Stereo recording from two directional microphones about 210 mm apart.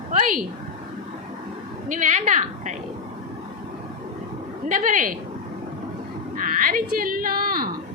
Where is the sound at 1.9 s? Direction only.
35° right (ahead or behind).